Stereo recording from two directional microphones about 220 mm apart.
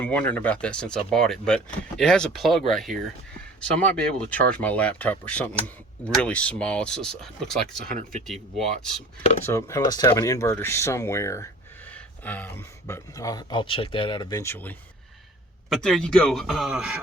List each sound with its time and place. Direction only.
0.0 s speech: 5° left (ahead or behind)
7.9 s speech: 35° right (ahead or behind)
9.5 s speech: 15° left (ahead or behind); by 17.0 s 5° right (ahead or behind)